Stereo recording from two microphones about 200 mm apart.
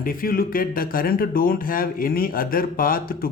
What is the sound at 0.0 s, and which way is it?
Speech, 45° left (ahead or behind).